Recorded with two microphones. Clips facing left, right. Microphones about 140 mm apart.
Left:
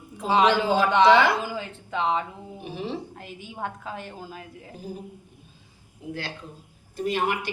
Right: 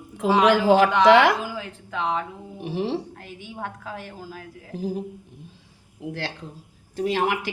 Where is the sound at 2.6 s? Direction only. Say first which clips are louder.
Right 6 dB; 75° right (ahead or behind).